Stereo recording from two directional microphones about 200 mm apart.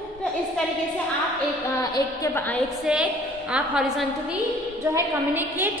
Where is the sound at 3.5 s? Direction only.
5° right (ahead or behind).